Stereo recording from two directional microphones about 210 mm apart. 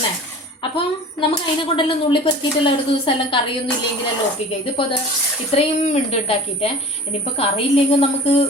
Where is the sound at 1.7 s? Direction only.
25° left (ahead or behind).